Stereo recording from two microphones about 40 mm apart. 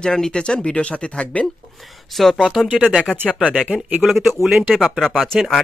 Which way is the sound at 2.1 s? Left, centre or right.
Centre.